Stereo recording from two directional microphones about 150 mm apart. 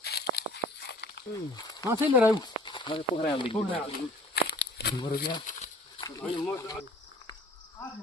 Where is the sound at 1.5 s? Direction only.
25° left (ahead or behind).